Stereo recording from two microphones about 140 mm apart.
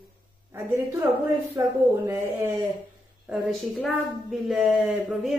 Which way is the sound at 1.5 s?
20° right (ahead or behind).